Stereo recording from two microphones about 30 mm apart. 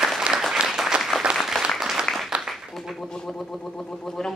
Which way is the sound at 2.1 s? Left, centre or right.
Left.